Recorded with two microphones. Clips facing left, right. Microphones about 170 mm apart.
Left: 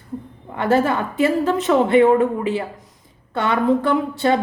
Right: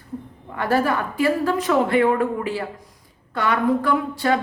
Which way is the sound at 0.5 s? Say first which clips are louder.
Left 3 dB; 25° left (ahead or behind).